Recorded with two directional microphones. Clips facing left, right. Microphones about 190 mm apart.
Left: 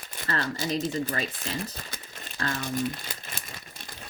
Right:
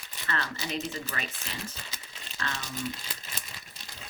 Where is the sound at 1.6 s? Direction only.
50° left (ahead or behind).